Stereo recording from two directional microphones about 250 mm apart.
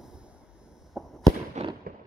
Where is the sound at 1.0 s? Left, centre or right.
Centre.